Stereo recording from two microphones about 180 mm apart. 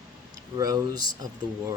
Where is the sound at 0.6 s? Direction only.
20° right (ahead or behind).